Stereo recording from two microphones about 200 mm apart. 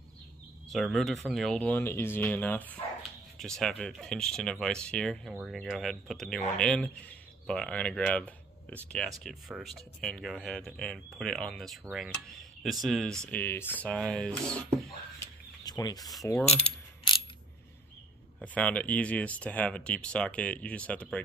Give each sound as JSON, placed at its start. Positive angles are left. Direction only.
{"t": 0.7, "sound": "speech", "side_deg": 0}
{"t": 15.1, "sound": "bird", "side_deg": 20}
{"t": 16.5, "sound": "mechanisms", "side_deg": 25}
{"t": 18.4, "sound": "speech", "side_deg": 5}